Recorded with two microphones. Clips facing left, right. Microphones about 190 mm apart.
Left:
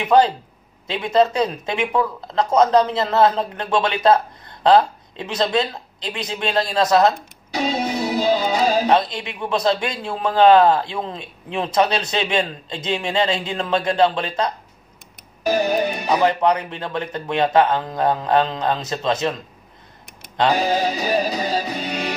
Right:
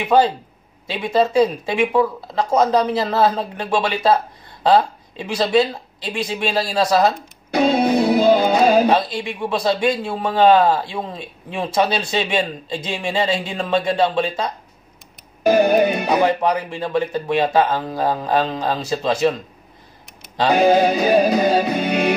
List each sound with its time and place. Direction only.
0.0 s a man's voice: 5° right (ahead or behind)
5.2 s a man's voice: 10° right (ahead or behind)
7.5 s music: 55° right (ahead or behind)
8.9 s a man's voice: 10° right (ahead or behind)
15.4 s music: 55° right (ahead or behind)
16.5 s a man's voice: 10° right (ahead or behind)
20.5 s music: 55° right (ahead or behind)